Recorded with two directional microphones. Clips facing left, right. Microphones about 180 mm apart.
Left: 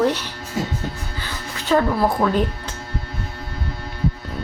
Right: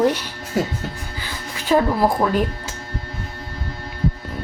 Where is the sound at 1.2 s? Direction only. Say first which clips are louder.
Even; 10° right (ahead or behind).